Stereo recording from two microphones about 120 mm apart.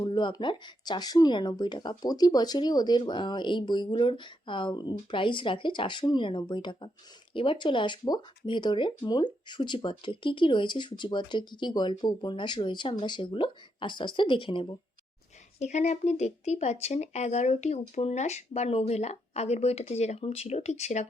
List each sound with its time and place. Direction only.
0.0 s speech: 40° left (ahead or behind)
15.5 s speech: 70° left (ahead or behind)